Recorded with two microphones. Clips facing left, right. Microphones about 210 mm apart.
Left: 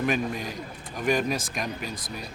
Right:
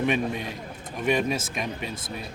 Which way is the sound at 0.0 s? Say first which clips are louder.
Right 1 dB; centre (ahead or behind).